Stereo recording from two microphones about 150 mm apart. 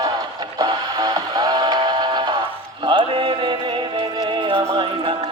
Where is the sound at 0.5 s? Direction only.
25° right (ahead or behind).